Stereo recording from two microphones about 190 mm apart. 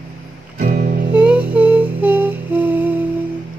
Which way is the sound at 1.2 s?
5° right (ahead or behind).